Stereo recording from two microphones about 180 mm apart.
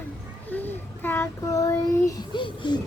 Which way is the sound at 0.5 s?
10° left (ahead or behind).